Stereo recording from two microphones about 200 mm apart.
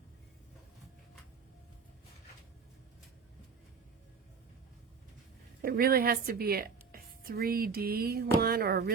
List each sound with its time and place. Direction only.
5.6 s a woman's voice: 50° right (ahead or behind)